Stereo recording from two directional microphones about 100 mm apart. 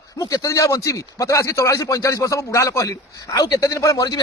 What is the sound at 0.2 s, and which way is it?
A man's voice, 35° left (ahead or behind).